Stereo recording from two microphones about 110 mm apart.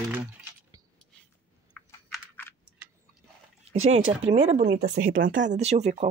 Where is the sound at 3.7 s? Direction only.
70° right (ahead or behind).